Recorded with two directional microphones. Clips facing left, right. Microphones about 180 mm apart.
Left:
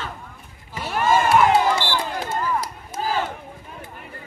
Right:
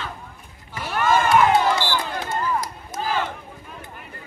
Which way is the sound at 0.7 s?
25° left (ahead or behind).